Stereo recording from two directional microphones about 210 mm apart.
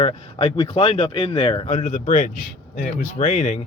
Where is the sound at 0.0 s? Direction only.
25° left (ahead or behind).